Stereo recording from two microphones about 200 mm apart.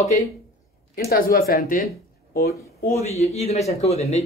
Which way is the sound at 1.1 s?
50° left (ahead or behind).